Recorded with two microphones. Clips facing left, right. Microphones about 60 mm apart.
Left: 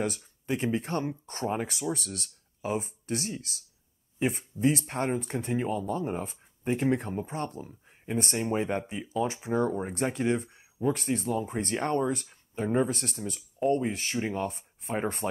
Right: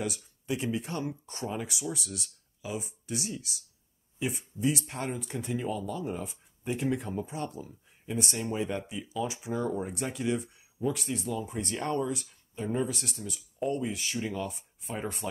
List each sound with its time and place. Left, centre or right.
0.2 s speech: left